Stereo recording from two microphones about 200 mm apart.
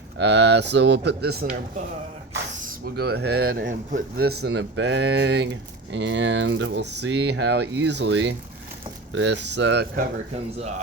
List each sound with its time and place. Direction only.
0.2 s speech: 60° right (ahead or behind)
2.8 s speech: 55° right (ahead or behind)